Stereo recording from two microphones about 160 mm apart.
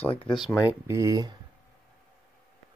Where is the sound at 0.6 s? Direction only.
15° right (ahead or behind).